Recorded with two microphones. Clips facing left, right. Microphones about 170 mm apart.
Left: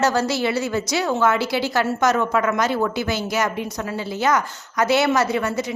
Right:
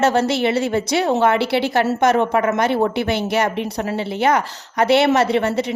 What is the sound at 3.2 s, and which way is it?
Speech, 60° right (ahead or behind).